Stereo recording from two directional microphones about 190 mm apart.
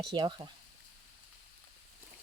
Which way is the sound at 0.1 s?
25° right (ahead or behind).